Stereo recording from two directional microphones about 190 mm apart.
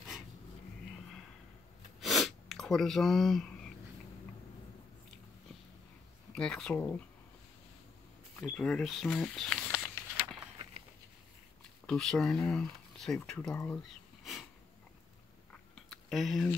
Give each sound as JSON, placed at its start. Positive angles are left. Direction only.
{"t": 2.0, "sound": "sniff", "side_deg": 0}
{"t": 6.3, "sound": "speech", "side_deg": 5}
{"t": 8.4, "sound": "speech", "side_deg": 5}
{"t": 11.8, "sound": "speech", "side_deg": 5}
{"t": 15.7, "sound": "a sound", "side_deg": 0}